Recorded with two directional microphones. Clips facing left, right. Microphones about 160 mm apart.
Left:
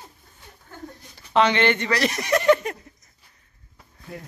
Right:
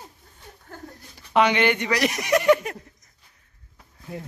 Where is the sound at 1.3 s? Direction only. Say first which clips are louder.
Even; 10° right (ahead or behind).